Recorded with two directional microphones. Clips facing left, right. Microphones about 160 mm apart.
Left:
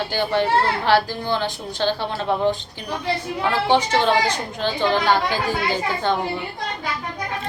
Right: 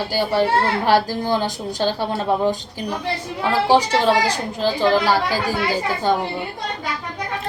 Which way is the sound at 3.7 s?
35° right (ahead or behind).